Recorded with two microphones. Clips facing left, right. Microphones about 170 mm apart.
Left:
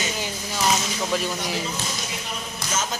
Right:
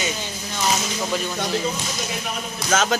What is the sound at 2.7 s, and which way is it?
Speech, 80° right.